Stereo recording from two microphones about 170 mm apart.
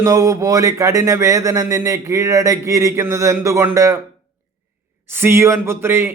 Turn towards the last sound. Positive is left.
turn(degrees=-15)  # may be behind; listen again after turning